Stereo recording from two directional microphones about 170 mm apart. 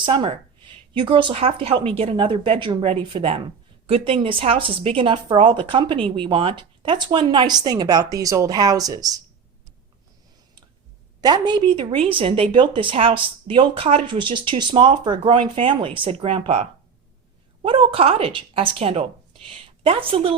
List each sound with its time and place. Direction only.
0.0 s a woman's voice: 30° right (ahead or behind)
11.2 s a woman's voice: 25° right (ahead or behind)